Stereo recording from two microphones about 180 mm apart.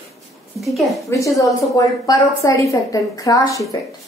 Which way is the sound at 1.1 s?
20° left (ahead or behind).